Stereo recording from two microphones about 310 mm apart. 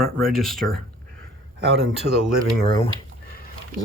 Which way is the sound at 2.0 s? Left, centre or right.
Right.